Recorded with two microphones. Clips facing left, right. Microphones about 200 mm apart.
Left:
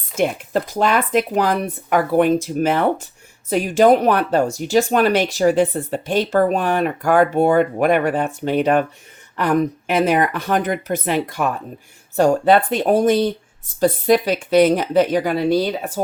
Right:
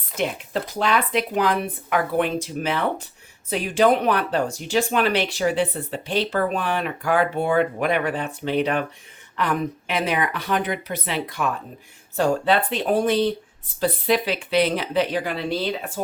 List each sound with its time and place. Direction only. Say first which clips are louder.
0.2 s speech: left 6 dB; 45° left (ahead or behind)